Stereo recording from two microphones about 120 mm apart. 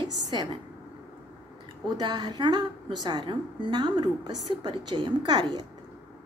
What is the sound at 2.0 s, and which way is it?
A woman's voice, 35° right (ahead or behind).